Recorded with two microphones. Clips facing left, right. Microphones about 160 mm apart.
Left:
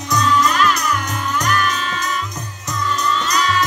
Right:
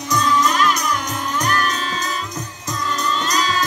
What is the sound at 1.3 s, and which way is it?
Music, 35° right (ahead or behind).